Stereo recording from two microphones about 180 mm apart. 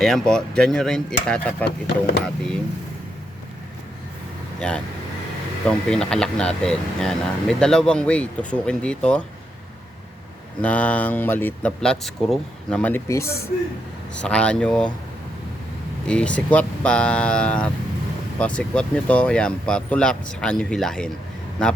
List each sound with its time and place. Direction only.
0.0 s speech: centre (ahead or behind)
4.6 s speech: 5° left (ahead or behind)
10.6 s speech: 10° left (ahead or behind)
16.0 s speech: 5° left (ahead or behind)